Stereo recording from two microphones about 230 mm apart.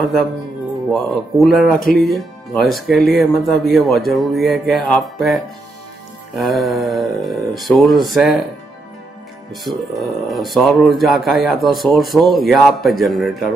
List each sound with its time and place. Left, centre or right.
0.0 s speech: centre
9.5 s speech: centre